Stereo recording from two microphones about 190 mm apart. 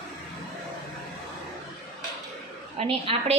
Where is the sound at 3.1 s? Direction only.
30° right (ahead or behind).